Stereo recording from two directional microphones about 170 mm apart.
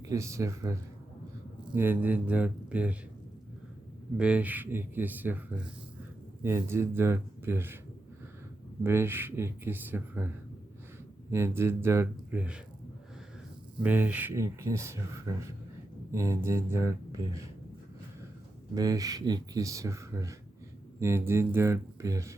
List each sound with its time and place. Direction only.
0.0 s speech: 20° right (ahead or behind)
4.2 s speech: 5° right (ahead or behind)
8.8 s speech: 15° right (ahead or behind)
13.8 s speech: 10° right (ahead or behind)
18.7 s speech: 20° right (ahead or behind)